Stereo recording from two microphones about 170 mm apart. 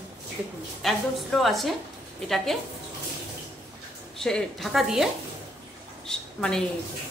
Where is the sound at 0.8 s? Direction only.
Centre (ahead or behind).